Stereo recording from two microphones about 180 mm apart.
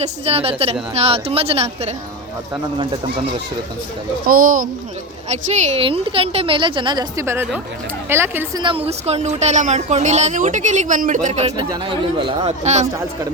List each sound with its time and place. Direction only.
0.0 s a woman's voice: 35° right (ahead or behind)
4.3 s speech: 50° right (ahead or behind)
5.3 s a woman's voice: 35° right (ahead or behind); by 8.6 s 15° right (ahead or behind)
8.6 s speech: 30° right (ahead or behind)